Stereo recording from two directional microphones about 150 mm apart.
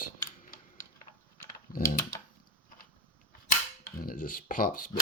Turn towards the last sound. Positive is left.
turn(degrees=65)  # may be behind; listen again after turning